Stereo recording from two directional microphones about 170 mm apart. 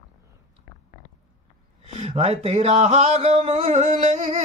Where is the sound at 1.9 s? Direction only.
40° right (ahead or behind).